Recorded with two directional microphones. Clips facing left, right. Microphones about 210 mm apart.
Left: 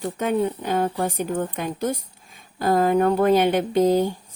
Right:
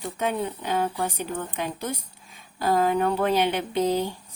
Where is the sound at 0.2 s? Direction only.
50° left (ahead or behind).